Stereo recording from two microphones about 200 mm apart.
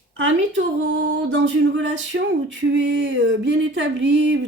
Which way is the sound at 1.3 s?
65° right (ahead or behind).